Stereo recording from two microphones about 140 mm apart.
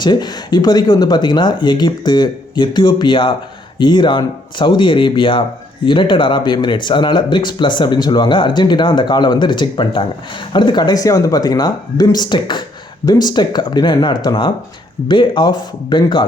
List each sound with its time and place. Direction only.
0.0 s speech: 30° left (ahead or behind)